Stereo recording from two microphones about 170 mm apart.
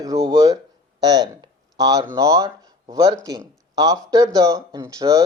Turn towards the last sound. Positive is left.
turn(degrees=-20)  # may be behind; listen again after turning